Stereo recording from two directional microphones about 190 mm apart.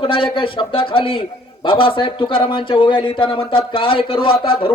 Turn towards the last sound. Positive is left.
turn(degrees=25)  # may be behind; listen again after turning